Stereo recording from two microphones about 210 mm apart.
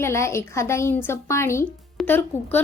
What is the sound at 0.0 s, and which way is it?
A woman's voice, 15° left (ahead or behind).